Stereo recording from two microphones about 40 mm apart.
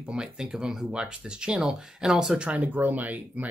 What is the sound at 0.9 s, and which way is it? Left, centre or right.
Speech, right.